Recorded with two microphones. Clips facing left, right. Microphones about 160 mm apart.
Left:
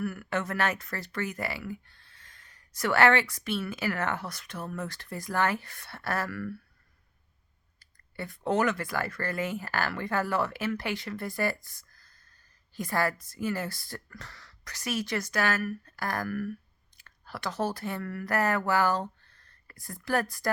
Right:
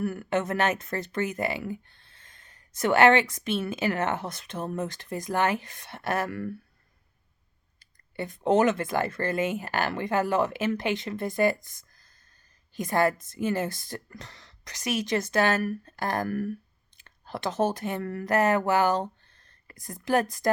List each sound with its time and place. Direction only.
0.0 s speech: 25° right (ahead or behind)
7.8 s speech: 20° right (ahead or behind)